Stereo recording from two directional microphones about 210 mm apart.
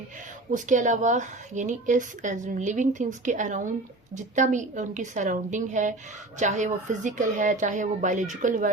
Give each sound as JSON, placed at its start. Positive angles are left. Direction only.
{"t": 0.5, "sound": "a woman's voice", "side_deg": -35}